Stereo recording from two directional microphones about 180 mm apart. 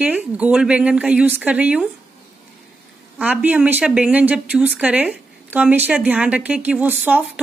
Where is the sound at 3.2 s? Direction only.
10° right (ahead or behind).